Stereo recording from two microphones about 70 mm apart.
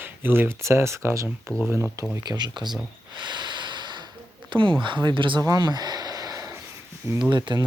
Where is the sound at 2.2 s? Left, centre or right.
Right.